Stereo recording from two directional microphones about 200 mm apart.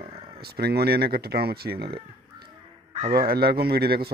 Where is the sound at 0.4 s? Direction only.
50° right (ahead or behind).